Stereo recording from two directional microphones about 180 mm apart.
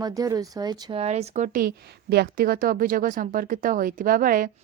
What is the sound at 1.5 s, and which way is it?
A woman's voice, 60° right (ahead or behind).